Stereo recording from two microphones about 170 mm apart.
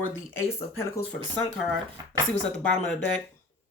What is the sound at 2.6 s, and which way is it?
Speech, 5° left (ahead or behind).